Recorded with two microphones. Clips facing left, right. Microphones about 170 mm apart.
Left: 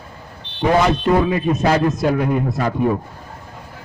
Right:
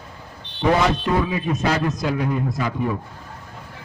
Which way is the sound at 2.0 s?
55° left (ahead or behind).